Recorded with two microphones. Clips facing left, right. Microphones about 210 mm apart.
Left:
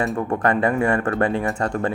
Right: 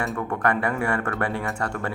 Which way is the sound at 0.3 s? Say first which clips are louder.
Left 5 dB; 20° left (ahead or behind).